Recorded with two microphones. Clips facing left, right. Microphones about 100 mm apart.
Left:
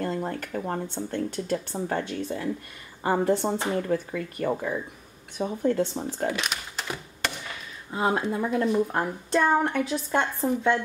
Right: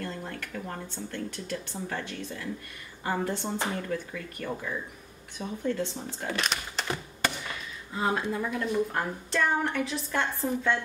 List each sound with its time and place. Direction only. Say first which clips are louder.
0.0 s a woman's voice: left 7 dB; 35° left (ahead or behind)
6.3 s a sound: even; 5° left (ahead or behind)
7.9 s a woman's voice: left 3 dB; 35° left (ahead or behind)